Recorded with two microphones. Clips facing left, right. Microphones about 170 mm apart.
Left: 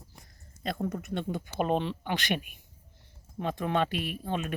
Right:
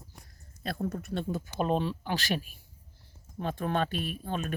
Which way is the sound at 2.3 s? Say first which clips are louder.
Even; 35° right (ahead or behind).